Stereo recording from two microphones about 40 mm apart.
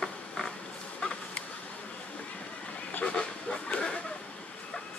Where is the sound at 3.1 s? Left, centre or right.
Left.